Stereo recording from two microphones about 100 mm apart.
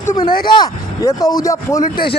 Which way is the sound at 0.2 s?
45° left (ahead or behind).